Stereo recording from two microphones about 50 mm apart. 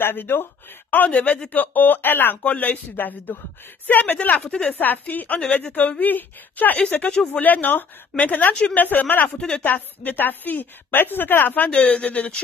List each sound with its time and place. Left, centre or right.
0.0 s speech: left
0.8 s a woman's voice: left
2.4 s a woman's voice: left
4.4 s speech: centre
4.7 s a woman's voice: left
6.8 s a woman's voice: left
11.7 s speech: left